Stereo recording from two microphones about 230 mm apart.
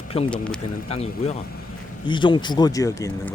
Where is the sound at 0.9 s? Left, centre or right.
Left.